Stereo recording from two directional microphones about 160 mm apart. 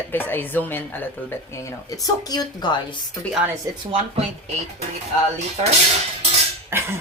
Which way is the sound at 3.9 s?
40° right (ahead or behind).